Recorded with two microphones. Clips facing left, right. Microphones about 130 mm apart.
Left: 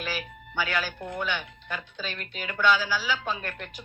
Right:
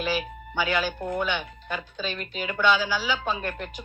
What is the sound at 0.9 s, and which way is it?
Speech, 50° right (ahead or behind).